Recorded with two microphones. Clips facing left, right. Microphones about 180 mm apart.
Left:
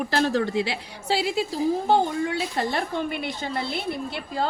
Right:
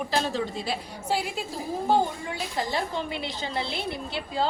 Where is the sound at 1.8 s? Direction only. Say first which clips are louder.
Left 3 dB; 70° left (ahead or behind).